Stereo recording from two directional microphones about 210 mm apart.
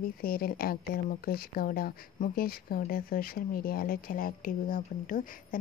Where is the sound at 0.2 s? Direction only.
45° left (ahead or behind).